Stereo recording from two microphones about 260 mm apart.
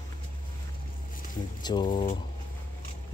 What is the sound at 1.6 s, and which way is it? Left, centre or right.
Speech, centre.